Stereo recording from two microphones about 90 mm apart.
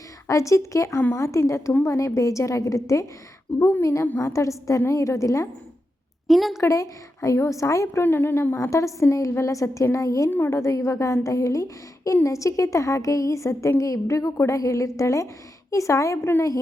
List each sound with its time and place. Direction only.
0.3 s a woman's voice: 35° left (ahead or behind)
3.5 s a woman's voice: 20° left (ahead or behind)
4.2 s a woman's voice: 35° left (ahead or behind)
6.2 s a woman's voice: centre (ahead or behind)
6.6 s a woman's voice: 35° left (ahead or behind)
8.0 s a woman's voice: 25° left (ahead or behind)
8.6 s a woman's voice: 35° left (ahead or behind)
10.2 s a woman's voice: 20° left (ahead or behind)
10.5 s a woman's voice: 35° left (ahead or behind)